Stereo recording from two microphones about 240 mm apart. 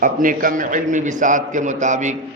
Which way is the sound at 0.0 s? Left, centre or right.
Right.